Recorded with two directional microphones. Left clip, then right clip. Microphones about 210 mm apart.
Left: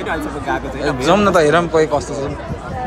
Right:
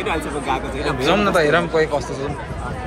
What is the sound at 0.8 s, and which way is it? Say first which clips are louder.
Speech: left 4 dB; 25° left (ahead or behind).